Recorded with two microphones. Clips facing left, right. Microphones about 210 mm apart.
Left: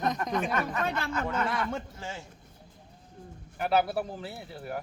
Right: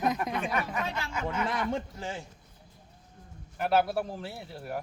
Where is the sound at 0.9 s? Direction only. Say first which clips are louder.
Left 4 dB; 55° left (ahead or behind).